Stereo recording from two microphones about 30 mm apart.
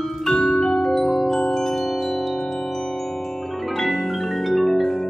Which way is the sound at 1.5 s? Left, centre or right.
Centre.